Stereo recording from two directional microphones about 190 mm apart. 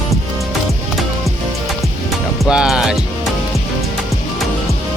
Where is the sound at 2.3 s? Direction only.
5° right (ahead or behind).